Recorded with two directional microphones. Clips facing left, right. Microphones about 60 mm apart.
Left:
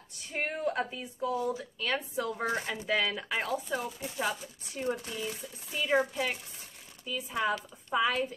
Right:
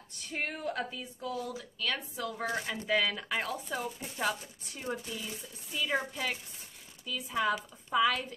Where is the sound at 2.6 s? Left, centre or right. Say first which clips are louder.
Even; centre.